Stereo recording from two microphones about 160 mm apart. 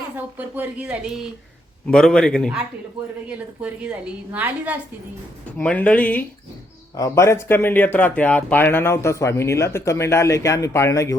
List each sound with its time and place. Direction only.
0.3 s a woman's voice: 10° right (ahead or behind)
3.2 s a woman's voice: 5° right (ahead or behind)
5.5 s speech: 10° left (ahead or behind)